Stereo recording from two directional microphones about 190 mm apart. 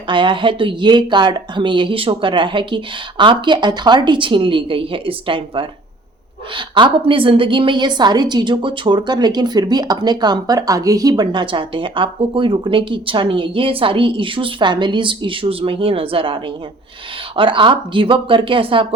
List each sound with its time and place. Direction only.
0.1 s a woman's voice: 25° right (ahead or behind)